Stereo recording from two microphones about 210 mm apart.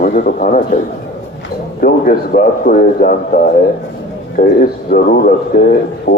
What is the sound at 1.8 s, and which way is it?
A man's voice, 40° left (ahead or behind).